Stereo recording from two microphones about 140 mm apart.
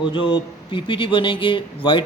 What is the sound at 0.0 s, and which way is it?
Speech, 35° left (ahead or behind).